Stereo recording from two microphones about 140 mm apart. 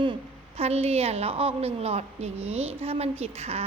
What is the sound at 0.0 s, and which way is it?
A woman's voice, 40° right (ahead or behind).